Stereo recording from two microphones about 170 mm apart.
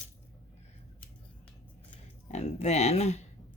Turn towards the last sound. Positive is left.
turn(degrees=40)  # may be behind; listen again after turning